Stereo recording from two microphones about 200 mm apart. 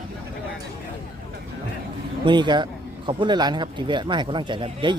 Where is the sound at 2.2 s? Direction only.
20° right (ahead or behind).